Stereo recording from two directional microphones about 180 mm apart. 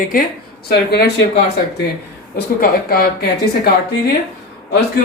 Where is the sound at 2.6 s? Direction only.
60° left (ahead or behind).